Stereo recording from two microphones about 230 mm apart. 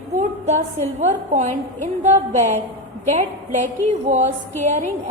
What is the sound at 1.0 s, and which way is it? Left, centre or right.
A woman's voice, right.